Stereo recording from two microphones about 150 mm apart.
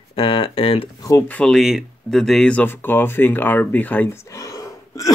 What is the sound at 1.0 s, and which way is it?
Speech, 15° left (ahead or behind).